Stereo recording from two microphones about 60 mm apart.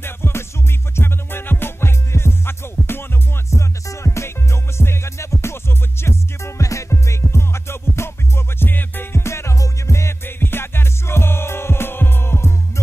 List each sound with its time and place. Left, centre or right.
0.0 s music: left
6.6 s music: left
9.2 s music: left
10.2 s music: left